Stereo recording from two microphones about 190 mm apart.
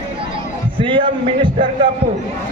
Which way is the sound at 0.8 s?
25° right (ahead or behind).